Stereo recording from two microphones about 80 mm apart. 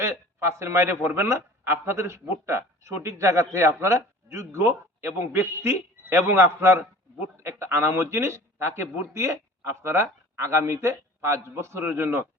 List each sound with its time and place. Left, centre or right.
0.0 s a man's voice: right